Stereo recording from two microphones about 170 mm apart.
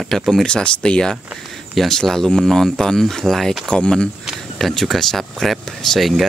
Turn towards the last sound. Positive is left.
turn(degrees=0)  # may be behind; listen again after turning